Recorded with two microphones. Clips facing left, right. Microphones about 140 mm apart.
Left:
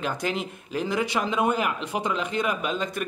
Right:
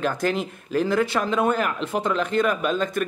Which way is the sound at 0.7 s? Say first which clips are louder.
Right 5 dB; 15° left (ahead or behind).